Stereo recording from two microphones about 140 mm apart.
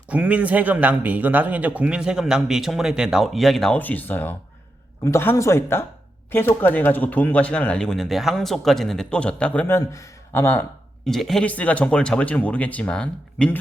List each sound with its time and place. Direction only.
0.1 s speech: 10° right (ahead or behind); by 10.7 s 15° left (ahead or behind)
11.0 s speech: centre (ahead or behind)